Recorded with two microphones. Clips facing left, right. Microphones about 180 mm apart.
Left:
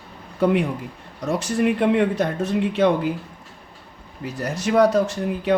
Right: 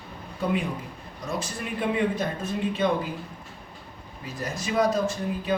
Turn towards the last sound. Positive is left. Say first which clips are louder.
# left 5 dB
turn(degrees=75)  # may be behind; listen again after turning